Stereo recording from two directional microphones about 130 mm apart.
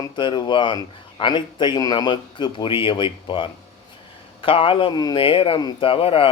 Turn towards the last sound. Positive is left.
turn(degrees=45)  # may be behind; listen again after turning